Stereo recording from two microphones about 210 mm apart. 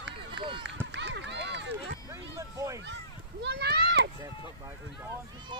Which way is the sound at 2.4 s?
15° right (ahead or behind).